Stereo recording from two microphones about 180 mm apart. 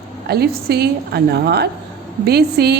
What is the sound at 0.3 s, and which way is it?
Speech, 60° right (ahead or behind).